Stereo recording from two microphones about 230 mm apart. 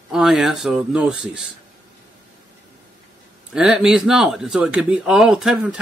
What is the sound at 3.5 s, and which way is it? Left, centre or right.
Speech, centre.